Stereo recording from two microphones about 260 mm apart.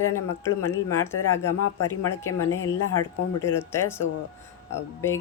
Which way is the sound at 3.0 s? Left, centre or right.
Centre.